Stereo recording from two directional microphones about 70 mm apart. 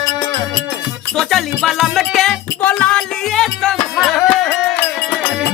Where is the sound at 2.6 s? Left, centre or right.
Centre.